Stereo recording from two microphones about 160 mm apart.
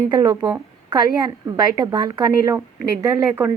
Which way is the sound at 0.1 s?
25° right (ahead or behind).